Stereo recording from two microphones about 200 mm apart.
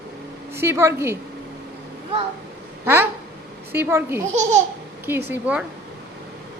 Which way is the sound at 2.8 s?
10° right (ahead or behind).